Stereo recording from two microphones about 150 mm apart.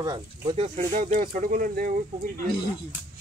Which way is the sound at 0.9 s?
65° right (ahead or behind).